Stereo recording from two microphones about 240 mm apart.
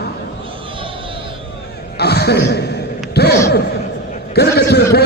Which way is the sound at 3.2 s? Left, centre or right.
Left.